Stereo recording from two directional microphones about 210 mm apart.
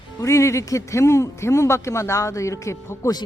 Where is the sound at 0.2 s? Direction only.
15° left (ahead or behind).